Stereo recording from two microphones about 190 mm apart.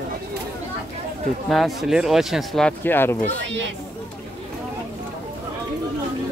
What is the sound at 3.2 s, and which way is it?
Speech, 75° right (ahead or behind).